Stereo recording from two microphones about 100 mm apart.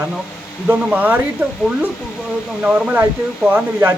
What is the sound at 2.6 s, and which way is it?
Speech, 15° right (ahead or behind).